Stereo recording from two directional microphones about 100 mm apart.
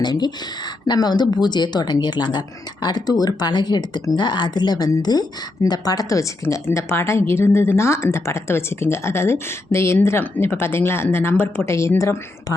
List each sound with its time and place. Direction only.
0.0 s a woman's voice: 45° left (ahead or behind); by 12.5 s 30° left (ahead or behind)